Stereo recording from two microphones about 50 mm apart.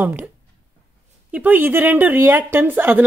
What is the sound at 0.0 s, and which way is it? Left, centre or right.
Speech, right.